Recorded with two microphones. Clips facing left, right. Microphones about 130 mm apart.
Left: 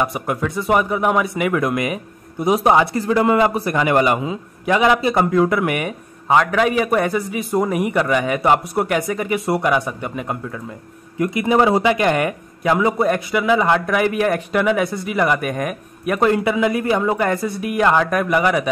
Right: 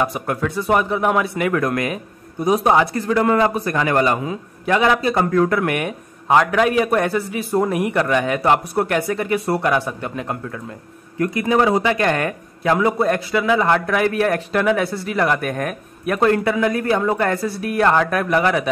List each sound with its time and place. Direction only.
0.0 s a man's voice: centre (ahead or behind)
11.1 s a man's voice: 20° left (ahead or behind)